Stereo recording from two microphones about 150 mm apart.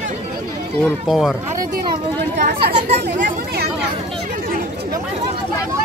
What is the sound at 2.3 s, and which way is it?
Speech, 80° right.